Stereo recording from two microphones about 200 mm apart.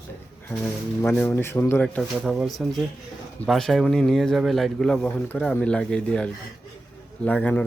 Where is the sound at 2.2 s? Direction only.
Centre (ahead or behind).